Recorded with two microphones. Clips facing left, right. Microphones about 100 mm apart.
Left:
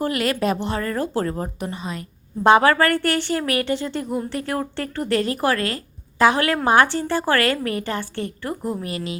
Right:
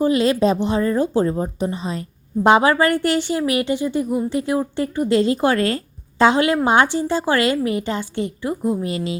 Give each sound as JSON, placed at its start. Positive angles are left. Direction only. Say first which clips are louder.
{"t": 0.0, "sound": "a woman's voice", "louder": "right 5 dB", "side_deg": -20}
{"t": 2.4, "sound": "a woman's voice", "louder": "right 1 dB", "side_deg": -20}
{"t": 8.9, "sound": "a woman's voice", "louder": "right 4 dB", "side_deg": -25}